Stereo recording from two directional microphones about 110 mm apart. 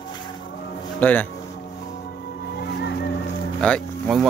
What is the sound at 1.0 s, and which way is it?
Speech, 15° left (ahead or behind).